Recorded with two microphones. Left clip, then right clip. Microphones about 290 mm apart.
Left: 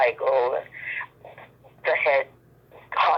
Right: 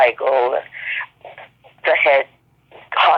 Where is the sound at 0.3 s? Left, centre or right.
Centre.